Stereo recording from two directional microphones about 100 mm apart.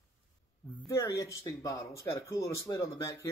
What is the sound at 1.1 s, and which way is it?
Speech, 35° left (ahead or behind).